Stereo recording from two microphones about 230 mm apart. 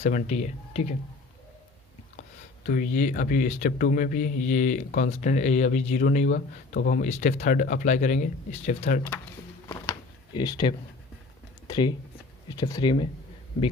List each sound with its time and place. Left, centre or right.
0.0 s speech: left
2.6 s speech: left
9.6 s a sound: centre
11.7 s speech: centre